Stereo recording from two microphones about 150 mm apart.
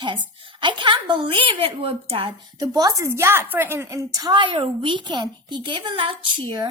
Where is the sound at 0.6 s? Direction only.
30° right (ahead or behind).